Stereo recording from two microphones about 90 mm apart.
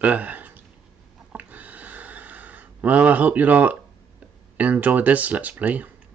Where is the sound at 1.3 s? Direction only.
20° right (ahead or behind).